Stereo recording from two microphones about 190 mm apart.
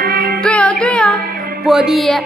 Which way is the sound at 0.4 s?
5° left (ahead or behind).